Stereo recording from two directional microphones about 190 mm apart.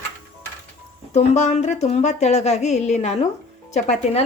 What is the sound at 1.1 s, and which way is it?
Speech, 35° left (ahead or behind).